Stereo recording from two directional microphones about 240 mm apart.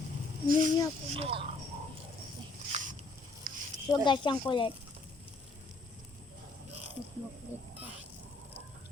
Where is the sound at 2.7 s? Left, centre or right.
Right.